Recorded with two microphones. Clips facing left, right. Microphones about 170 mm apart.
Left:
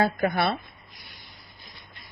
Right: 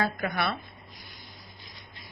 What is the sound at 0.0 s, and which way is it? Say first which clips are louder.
Speech: left 5 dB; 30° left (ahead or behind).